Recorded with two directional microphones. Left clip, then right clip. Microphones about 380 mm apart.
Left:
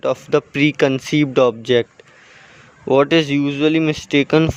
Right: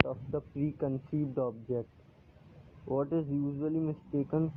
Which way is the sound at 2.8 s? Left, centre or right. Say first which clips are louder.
Left 19 dB; left.